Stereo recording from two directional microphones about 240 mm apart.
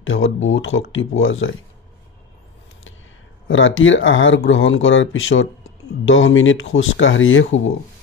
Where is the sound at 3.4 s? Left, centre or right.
Left.